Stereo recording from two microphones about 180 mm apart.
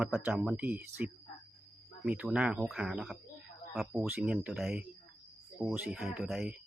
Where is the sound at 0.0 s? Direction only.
5° right (ahead or behind).